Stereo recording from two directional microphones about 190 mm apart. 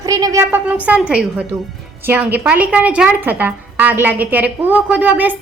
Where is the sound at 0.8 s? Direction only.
5° right (ahead or behind).